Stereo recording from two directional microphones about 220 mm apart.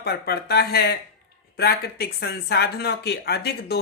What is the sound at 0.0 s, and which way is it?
Speech, 45° left (ahead or behind).